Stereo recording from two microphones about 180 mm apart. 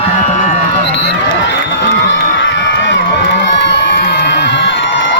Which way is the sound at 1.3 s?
85° left.